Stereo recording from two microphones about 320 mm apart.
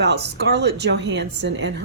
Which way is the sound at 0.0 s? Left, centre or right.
Right.